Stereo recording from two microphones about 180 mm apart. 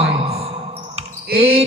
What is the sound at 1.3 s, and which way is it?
Speech, 35° right (ahead or behind).